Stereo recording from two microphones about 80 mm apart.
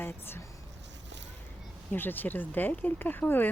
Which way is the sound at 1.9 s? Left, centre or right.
Left.